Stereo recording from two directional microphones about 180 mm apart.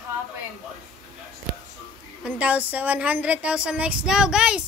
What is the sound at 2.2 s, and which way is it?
A woman's voice, 10° right (ahead or behind).